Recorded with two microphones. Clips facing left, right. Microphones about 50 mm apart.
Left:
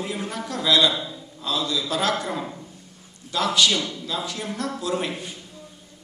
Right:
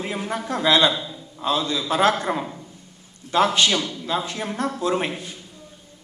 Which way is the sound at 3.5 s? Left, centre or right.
Right.